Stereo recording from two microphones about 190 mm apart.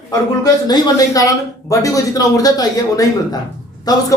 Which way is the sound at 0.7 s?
20° left (ahead or behind).